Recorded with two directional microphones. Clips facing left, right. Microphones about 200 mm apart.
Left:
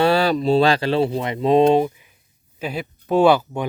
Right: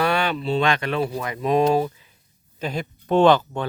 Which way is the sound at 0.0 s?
30° left (ahead or behind).